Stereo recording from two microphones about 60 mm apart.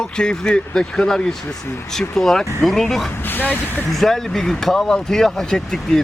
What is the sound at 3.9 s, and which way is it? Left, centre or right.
Speech, centre.